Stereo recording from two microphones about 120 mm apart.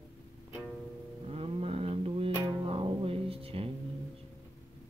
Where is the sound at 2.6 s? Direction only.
50° right (ahead or behind).